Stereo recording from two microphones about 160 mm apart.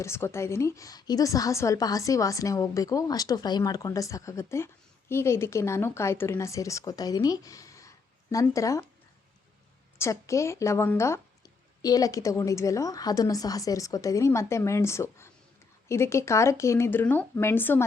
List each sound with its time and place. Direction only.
0.0 s a woman's voice: 15° left (ahead or behind)
10.0 s a woman's voice: 20° left (ahead or behind)